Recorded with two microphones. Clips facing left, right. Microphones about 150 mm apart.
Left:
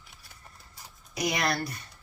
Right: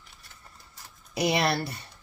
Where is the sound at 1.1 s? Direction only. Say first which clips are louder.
Right 4 dB; 30° right (ahead or behind).